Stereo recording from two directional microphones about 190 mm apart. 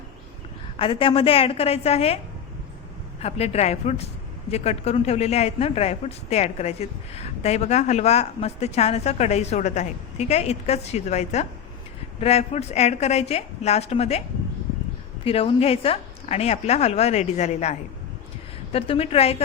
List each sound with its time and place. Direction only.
0.8 s speech: 30° left (ahead or behind)
3.2 s speech: 35° left (ahead or behind)
15.2 s speech: 30° left (ahead or behind)